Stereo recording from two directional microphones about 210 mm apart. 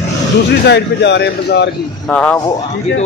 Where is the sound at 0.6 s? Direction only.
55° left (ahead or behind).